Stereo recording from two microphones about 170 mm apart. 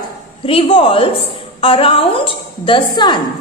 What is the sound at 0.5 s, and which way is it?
A woman's voice, 30° left (ahead or behind).